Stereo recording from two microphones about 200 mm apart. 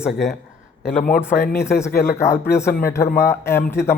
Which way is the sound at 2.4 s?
15° left (ahead or behind).